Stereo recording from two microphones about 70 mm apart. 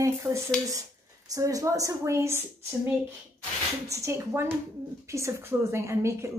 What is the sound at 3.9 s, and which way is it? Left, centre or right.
A woman's voice, right.